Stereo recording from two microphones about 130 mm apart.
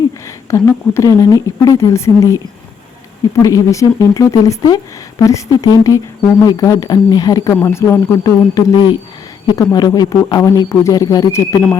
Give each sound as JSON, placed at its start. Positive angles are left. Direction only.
{"t": 0.5, "sound": "speech", "side_deg": 20}
{"t": 8.2, "sound": "speech", "side_deg": 30}